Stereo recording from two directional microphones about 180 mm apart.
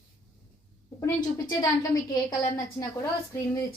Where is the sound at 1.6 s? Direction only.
20° left (ahead or behind).